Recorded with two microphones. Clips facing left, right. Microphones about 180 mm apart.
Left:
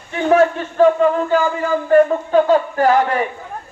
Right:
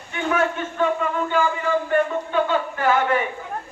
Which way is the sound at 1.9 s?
40° left (ahead or behind).